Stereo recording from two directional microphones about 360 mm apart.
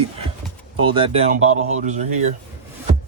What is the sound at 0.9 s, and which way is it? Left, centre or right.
Speech, centre.